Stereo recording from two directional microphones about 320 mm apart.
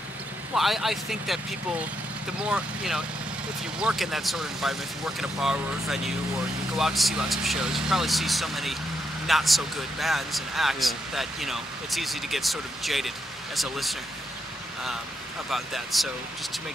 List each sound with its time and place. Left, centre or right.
0.6 s speech: centre
2.4 s speech: centre
15.5 s speech: centre